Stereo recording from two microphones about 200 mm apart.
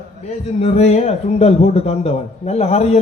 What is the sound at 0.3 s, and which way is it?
A woman's voice, 30° left (ahead or behind).